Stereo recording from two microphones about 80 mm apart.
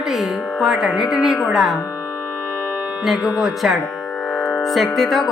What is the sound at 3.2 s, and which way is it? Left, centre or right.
Speech, left.